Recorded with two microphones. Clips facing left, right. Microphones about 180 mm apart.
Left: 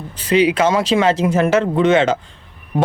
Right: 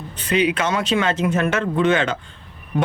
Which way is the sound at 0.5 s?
35° left (ahead or behind).